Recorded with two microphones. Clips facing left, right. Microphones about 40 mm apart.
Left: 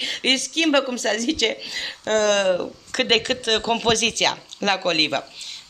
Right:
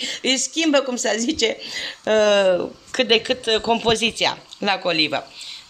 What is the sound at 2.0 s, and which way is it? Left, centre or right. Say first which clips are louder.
A woman's voice: right 3 dB; centre.